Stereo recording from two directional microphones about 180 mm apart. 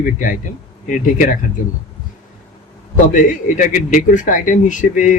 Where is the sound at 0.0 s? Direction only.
45° left (ahead or behind).